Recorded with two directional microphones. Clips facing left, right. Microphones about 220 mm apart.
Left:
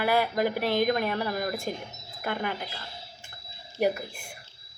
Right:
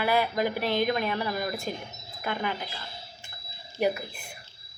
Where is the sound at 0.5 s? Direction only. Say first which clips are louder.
Left 1 dB; 10° left (ahead or behind).